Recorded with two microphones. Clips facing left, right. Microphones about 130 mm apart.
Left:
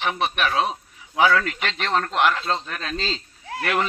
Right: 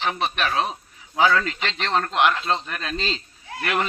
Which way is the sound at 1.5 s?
5° left (ahead or behind).